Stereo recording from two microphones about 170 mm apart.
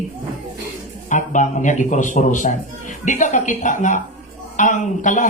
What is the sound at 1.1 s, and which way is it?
Speech, 45° left (ahead or behind).